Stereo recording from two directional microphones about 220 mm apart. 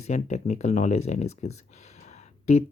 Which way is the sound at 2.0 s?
30° left (ahead or behind).